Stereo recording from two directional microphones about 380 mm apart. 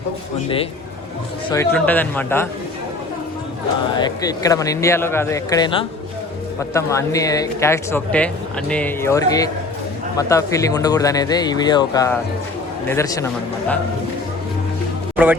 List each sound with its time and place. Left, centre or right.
1.5 s speech: centre
3.9 s speech: centre
15.1 s music: centre